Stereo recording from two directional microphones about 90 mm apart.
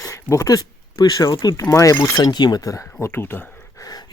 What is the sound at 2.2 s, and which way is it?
Speech, 50° left (ahead or behind).